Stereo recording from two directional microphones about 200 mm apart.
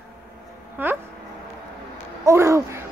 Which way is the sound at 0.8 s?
10° right (ahead or behind).